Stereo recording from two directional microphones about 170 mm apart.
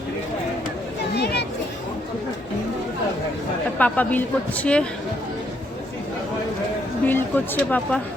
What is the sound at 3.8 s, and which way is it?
A woman's voice, 10° left (ahead or behind).